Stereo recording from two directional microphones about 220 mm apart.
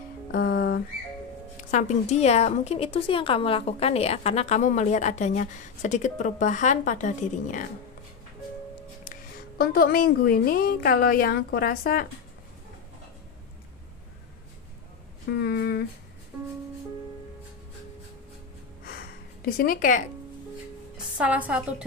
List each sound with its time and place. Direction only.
0.3 s music: 45° left (ahead or behind)
1.7 s a woman's voice: 30° left (ahead or behind)
9.6 s a woman's voice: 45° left (ahead or behind)
15.3 s a woman's voice: 45° left (ahead or behind)
18.9 s a sound: 40° left (ahead or behind)
21.2 s a woman's voice: 5° right (ahead or behind)